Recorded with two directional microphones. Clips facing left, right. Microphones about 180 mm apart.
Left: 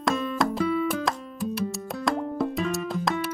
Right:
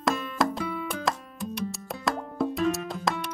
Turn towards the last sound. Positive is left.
turn(degrees=0)  # may be behind; listen again after turning